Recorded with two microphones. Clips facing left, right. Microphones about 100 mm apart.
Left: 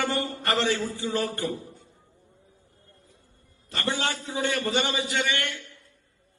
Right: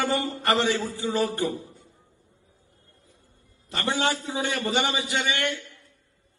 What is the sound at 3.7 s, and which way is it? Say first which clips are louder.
A man's voice: right 3 dB; 20° right (ahead or behind).